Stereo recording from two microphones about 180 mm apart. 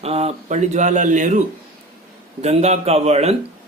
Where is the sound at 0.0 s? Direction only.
35° right (ahead or behind).